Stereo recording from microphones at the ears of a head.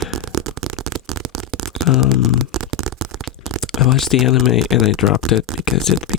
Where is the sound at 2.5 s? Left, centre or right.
Right.